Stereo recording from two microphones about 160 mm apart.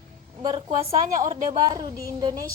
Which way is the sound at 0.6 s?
40° right (ahead or behind).